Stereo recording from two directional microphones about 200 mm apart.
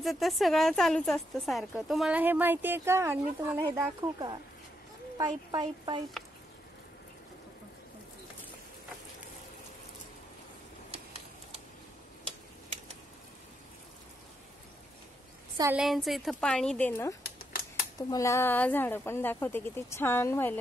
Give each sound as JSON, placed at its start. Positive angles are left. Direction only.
{"t": 0.0, "sound": "a woman's voice", "side_deg": 0}
{"t": 10.9, "sound": "a sound", "side_deg": -30}
{"t": 15.7, "sound": "a woman's voice", "side_deg": 0}
{"t": 17.4, "sound": "typewriter", "side_deg": 45}
{"t": 17.9, "sound": "a woman's voice", "side_deg": 15}